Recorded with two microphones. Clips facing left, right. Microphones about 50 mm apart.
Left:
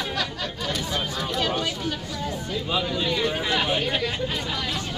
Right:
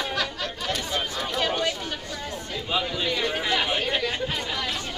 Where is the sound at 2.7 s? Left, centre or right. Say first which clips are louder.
Even; centre.